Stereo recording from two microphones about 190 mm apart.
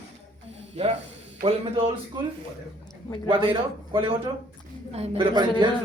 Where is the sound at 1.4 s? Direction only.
30° right (ahead or behind).